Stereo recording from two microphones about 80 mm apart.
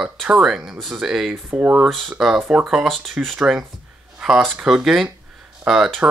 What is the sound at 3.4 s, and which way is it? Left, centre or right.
Speech, centre.